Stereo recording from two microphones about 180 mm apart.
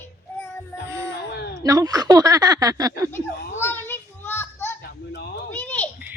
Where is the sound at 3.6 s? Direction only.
10° left (ahead or behind).